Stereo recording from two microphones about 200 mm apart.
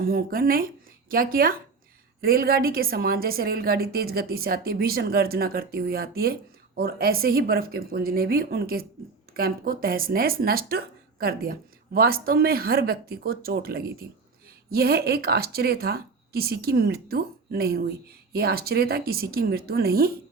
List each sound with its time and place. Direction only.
0.0 s a woman's voice: 45° right (ahead or behind)